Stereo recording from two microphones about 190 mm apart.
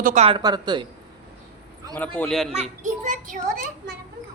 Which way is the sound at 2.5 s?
35° right (ahead or behind).